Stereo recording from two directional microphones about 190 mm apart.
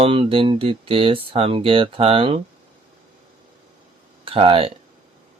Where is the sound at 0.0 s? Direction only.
30° right (ahead or behind).